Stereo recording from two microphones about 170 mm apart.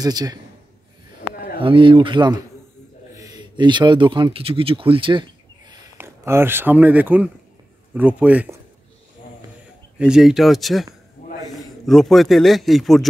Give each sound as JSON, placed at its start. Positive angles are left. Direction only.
{"t": 0.0, "sound": "speech", "side_deg": -20}
{"t": 1.3, "sound": "a sound", "side_deg": 60}
{"t": 1.6, "sound": "speech", "side_deg": -30}
{"t": 5.9, "sound": "speech", "side_deg": -15}
{"t": 9.9, "sound": "a man's voice", "side_deg": -5}